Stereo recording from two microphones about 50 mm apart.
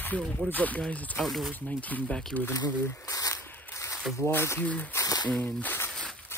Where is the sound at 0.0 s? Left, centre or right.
Left.